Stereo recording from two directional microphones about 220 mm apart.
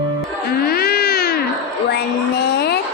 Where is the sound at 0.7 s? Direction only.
45° left (ahead or behind).